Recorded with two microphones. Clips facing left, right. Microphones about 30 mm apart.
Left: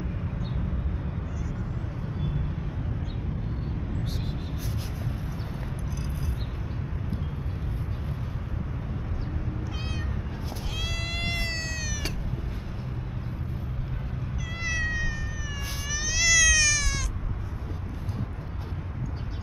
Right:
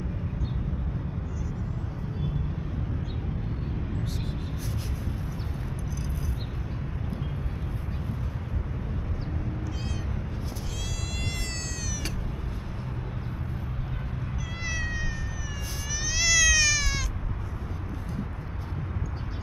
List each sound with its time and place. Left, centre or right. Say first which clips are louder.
11.2 s cat: left 6 dB; left
14.6 s cat: left 4 dB; centre